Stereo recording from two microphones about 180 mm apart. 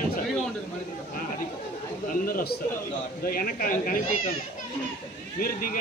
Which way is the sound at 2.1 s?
50° left (ahead or behind).